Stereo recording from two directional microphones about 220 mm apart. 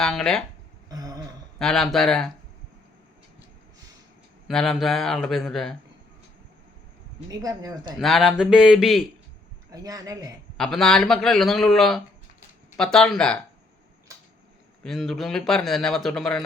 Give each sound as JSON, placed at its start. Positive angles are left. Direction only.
{"t": 0.0, "sound": "speech", "side_deg": 0}
{"t": 0.9, "sound": "a sound", "side_deg": -15}
{"t": 1.5, "sound": "speech", "side_deg": 0}
{"t": 4.4, "sound": "speech", "side_deg": 0}
{"t": 7.3, "sound": "speech", "side_deg": -15}
{"t": 7.9, "sound": "speech", "side_deg": 0}
{"t": 9.7, "sound": "speech", "side_deg": -15}
{"t": 10.6, "sound": "speech", "side_deg": 0}
{"t": 14.8, "sound": "speech", "side_deg": 0}